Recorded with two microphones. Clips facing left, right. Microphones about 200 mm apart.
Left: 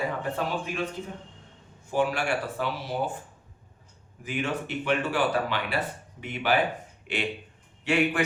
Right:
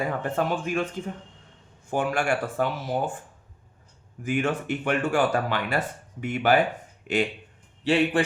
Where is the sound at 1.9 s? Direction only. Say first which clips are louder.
Right 1 dB; 50° right (ahead or behind).